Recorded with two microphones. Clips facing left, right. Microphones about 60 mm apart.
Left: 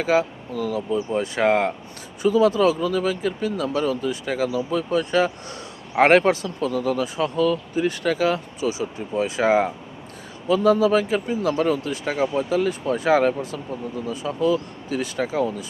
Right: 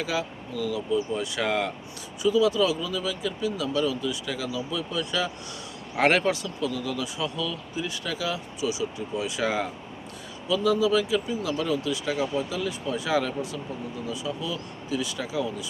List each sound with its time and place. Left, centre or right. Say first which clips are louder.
0.0 s speech: left 9 dB; left